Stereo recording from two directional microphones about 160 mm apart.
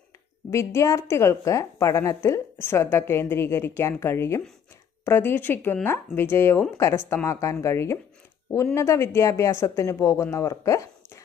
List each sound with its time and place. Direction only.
0.5 s a woman's voice: 15° left (ahead or behind)